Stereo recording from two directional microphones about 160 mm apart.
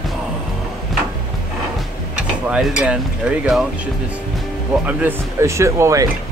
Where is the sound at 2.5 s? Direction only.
5° right (ahead or behind).